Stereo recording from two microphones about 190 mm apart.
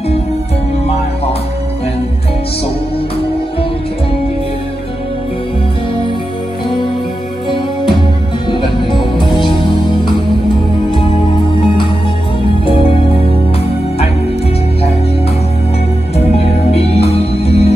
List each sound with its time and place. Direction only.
8.5 s music: 25° left (ahead or behind)
12.6 s music: 30° left (ahead or behind)
16.2 s music: 35° left (ahead or behind)